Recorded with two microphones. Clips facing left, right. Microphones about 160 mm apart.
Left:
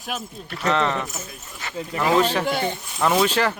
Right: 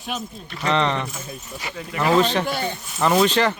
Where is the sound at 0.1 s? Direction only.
5° left (ahead or behind).